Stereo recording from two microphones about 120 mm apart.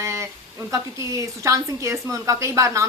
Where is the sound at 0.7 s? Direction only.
25° right (ahead or behind).